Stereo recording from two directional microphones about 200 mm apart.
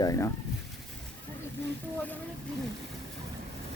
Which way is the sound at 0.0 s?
15° left (ahead or behind).